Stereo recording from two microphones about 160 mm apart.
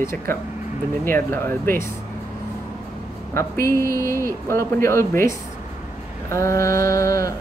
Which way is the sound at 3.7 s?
20° left (ahead or behind).